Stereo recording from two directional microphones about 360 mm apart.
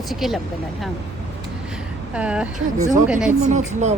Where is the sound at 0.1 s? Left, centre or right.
Centre.